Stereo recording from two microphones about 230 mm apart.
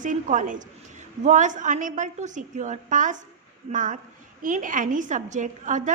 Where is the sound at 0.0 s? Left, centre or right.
Right.